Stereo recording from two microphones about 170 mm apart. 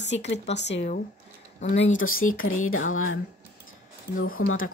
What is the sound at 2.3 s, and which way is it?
Speech, 55° left (ahead or behind).